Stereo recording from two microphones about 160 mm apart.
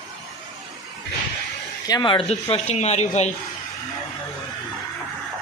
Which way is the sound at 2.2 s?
40° left (ahead or behind).